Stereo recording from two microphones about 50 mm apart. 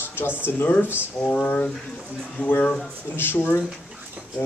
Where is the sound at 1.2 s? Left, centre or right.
Left.